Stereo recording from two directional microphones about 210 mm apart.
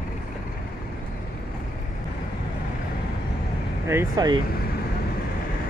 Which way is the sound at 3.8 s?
15° right (ahead or behind).